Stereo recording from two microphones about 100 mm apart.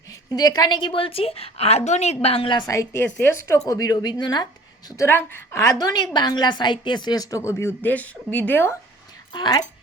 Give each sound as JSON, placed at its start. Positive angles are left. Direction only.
{"t": 0.3, "sound": "a woman's voice", "side_deg": 40}
{"t": 2.6, "sound": "a woman's voice", "side_deg": 35}
{"t": 4.9, "sound": "a woman's voice", "side_deg": 25}
{"t": 6.1, "sound": "a woman's voice", "side_deg": 45}
{"t": 9.3, "sound": "speech", "side_deg": 45}